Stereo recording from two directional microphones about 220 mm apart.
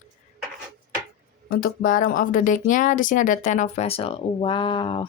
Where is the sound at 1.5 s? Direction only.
40° left (ahead or behind); by 5.1 s 20° left (ahead or behind).